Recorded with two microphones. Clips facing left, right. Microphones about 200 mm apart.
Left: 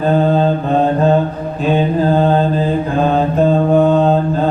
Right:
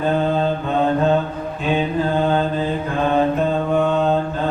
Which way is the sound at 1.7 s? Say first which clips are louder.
Left 5 dB; 35° left (ahead or behind).